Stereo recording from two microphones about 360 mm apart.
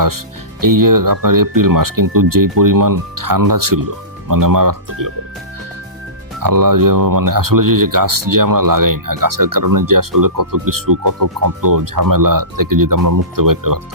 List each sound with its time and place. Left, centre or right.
0.6 s speech: right
6.4 s speech: right